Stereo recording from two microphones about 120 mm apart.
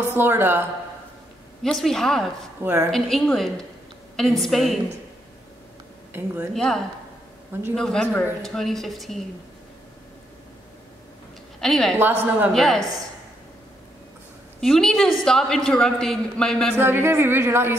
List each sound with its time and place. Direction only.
0.1 s a woman's voice: 20° right (ahead or behind)
1.6 s a woman's voice: 5° left (ahead or behind)
2.6 s a woman's voice: 20° right (ahead or behind)
2.9 s a woman's voice: centre (ahead or behind)
6.1 s a woman's voice: 15° right (ahead or behind)
6.5 s a woman's voice: 5° left (ahead or behind)
11.6 s a woman's voice: 5° left (ahead or behind)
12.0 s a woman's voice: 20° right (ahead or behind)
12.5 s a woman's voice: 5° left (ahead or behind)
14.6 s a woman's voice: 5° left (ahead or behind)
16.7 s a woman's voice: 20° right (ahead or behind)